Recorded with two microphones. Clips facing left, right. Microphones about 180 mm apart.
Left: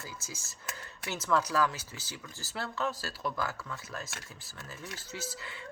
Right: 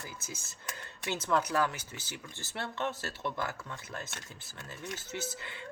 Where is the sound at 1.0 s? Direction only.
25° right (ahead or behind).